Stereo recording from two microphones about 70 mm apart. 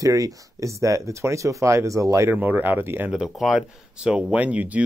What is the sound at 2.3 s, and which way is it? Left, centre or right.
Speech, right.